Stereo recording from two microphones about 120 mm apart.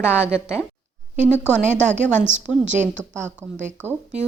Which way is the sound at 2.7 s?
85° right.